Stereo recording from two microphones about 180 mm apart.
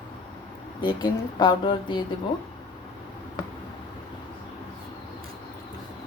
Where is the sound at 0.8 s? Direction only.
25° left (ahead or behind).